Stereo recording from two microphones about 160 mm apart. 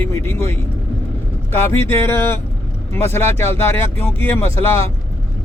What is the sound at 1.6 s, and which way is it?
Speech, 15° left (ahead or behind).